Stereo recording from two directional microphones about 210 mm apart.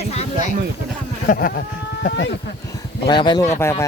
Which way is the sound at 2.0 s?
55° left (ahead or behind).